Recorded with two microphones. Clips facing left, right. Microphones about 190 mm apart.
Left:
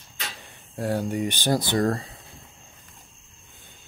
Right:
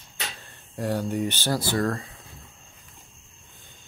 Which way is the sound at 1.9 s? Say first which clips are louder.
Left 3 dB; 30° left (ahead or behind).